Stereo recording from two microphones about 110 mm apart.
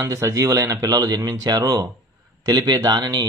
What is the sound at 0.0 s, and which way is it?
Speech, 30° right (ahead or behind).